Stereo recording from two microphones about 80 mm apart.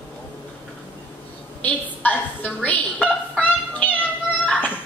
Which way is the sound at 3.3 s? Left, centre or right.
Left.